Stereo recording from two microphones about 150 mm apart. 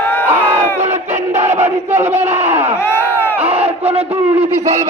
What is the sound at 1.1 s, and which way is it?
Battle cry, 50° right (ahead or behind).